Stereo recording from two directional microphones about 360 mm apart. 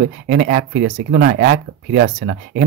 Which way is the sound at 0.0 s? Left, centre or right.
Right.